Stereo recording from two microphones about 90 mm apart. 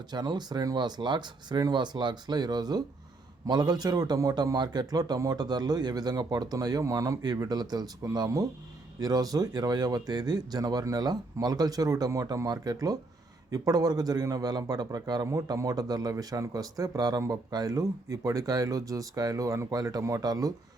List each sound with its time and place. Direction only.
0.1 s a man's voice: 55° right (ahead or behind)